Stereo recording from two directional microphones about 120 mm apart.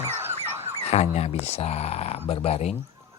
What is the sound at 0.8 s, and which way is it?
Speech, 65° left (ahead or behind).